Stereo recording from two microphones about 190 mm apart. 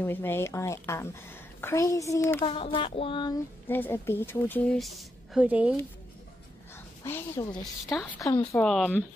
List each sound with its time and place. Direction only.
0.0 s a woman's voice: 10° left (ahead or behind)
2.4 s a sound: 30° left (ahead or behind)
3.6 s a woman's voice: 10° left (ahead or behind); by 5.8 s 5° right (ahead or behind)
7.0 s a woman's voice: 15° left (ahead or behind)
7.6 s speech: centre (ahead or behind)
8.2 s a woman's voice: 15° left (ahead or behind)
8.5 s speech: centre (ahead or behind)